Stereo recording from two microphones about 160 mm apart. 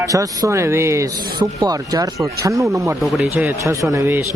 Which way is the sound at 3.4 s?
20° right (ahead or behind).